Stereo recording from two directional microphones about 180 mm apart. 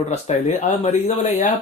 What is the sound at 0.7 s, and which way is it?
Speech, 40° left (ahead or behind).